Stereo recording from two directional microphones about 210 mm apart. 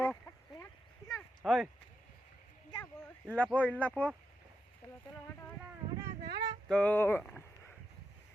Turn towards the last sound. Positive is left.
turn(degrees=5)  # may be behind; listen again after turning